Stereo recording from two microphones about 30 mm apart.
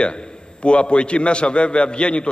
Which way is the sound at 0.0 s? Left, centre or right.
Left.